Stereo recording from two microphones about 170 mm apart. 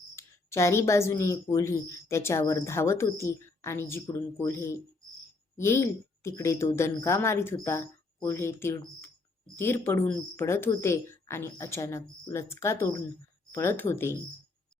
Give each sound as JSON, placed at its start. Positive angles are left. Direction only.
{"t": 0.2, "sound": "speech", "side_deg": 15}